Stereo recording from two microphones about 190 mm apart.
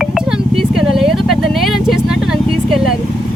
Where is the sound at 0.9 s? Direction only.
Centre (ahead or behind).